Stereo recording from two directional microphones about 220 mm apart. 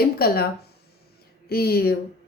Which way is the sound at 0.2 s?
45° left (ahead or behind).